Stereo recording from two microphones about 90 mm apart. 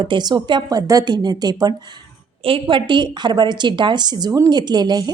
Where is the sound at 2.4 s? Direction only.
80° right.